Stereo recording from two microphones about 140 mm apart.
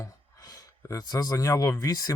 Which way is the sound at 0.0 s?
25° left (ahead or behind).